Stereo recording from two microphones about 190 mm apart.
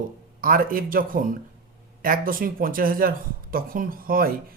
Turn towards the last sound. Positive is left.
turn(degrees=-50)  # may be behind; listen again after turning